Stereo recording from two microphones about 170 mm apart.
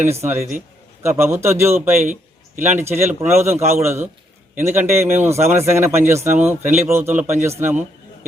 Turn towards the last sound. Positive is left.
turn(degrees=-15)  # may be behind; listen again after turning